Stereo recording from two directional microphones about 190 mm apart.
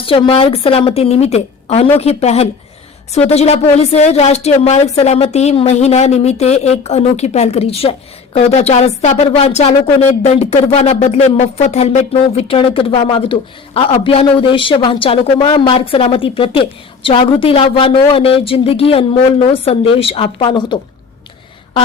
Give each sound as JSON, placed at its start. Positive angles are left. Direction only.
{"t": 0.0, "sound": "speech", "side_deg": 30}